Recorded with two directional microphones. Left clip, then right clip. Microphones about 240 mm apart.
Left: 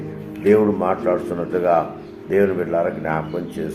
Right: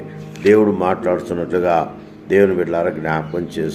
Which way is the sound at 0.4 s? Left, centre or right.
Right.